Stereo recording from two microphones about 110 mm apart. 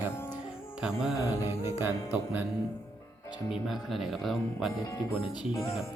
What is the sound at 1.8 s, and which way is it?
Music, 15° right (ahead or behind).